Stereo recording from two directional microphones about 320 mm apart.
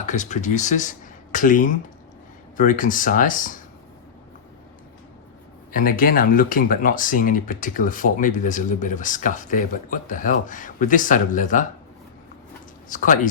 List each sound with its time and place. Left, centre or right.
0.0 s speech: left
5.7 s speech: left
12.9 s speech: left